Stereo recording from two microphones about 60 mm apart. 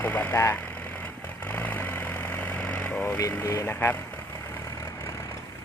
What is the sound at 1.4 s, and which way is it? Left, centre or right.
Vehicle, left.